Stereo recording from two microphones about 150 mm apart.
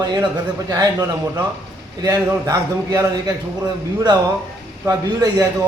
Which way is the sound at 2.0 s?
25° right (ahead or behind).